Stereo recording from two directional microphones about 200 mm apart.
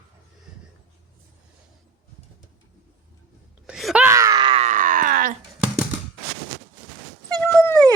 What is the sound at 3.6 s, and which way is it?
Groan, centre (ahead or behind).